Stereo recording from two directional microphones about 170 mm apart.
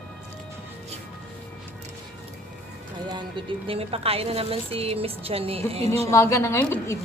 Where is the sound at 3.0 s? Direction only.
30° right (ahead or behind).